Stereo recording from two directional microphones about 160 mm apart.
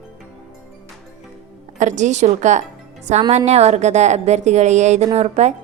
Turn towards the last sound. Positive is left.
turn(degrees=-40)  # may be behind; listen again after turning